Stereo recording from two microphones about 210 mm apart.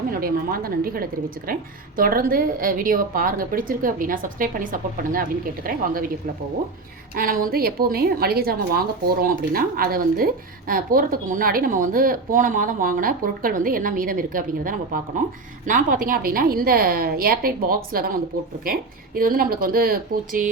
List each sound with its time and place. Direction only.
0.1 s a woman's voice: 45° right (ahead or behind)
7.2 s a woman's voice: 40° right (ahead or behind)